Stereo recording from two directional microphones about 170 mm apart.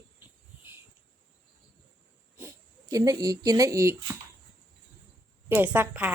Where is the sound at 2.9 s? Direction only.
20° right (ahead or behind).